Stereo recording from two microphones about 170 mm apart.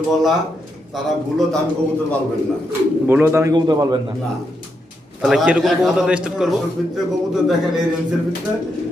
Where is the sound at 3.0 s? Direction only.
10° right (ahead or behind).